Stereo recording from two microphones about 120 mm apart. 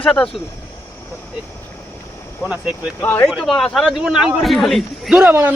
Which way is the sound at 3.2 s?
Centre (ahead or behind).